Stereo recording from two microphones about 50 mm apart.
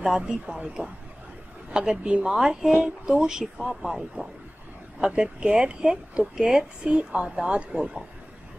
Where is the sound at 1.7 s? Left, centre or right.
Centre.